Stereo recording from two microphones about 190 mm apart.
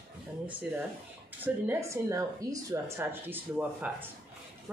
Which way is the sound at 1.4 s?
15° right (ahead or behind).